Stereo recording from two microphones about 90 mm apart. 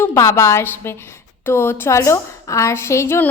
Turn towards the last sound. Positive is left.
turn(degrees=30)  # may be behind; listen again after turning